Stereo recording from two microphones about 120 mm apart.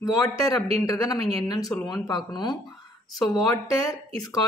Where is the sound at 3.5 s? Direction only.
30° left (ahead or behind).